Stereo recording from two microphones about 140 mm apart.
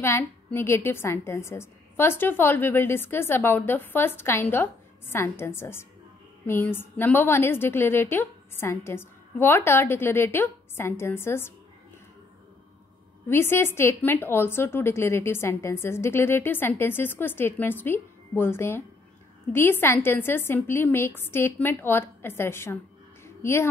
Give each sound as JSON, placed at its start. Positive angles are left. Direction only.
{"t": 0.0, "sound": "a woman's voice", "side_deg": 15}
{"t": 13.3, "sound": "a woman's voice", "side_deg": 15}
{"t": 23.2, "sound": "a sound", "side_deg": 20}